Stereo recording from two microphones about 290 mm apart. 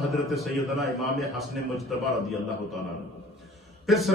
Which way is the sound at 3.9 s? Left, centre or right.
Centre.